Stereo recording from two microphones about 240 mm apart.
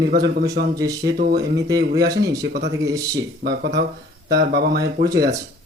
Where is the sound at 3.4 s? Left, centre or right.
Right.